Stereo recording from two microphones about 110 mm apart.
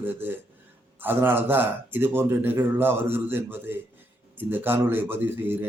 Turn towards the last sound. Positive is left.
turn(degrees=-20)  # may be behind; listen again after turning